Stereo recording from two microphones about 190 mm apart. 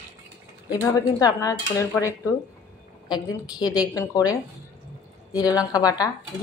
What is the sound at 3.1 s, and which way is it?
Speech, 20° left (ahead or behind).